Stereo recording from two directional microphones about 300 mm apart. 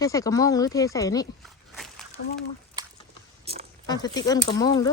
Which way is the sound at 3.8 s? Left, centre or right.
Centre.